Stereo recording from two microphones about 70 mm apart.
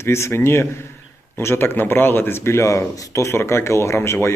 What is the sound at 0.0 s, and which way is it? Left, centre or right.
A man's voice, left.